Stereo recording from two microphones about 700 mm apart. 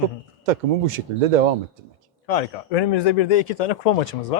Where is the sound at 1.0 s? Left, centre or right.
Right.